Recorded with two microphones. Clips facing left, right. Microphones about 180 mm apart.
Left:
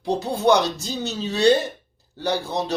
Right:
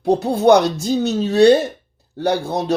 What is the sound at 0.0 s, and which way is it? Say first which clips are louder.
Speech: right 6 dB; 55° right (ahead or behind).